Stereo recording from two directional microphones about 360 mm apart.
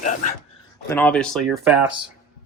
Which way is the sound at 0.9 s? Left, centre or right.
Centre.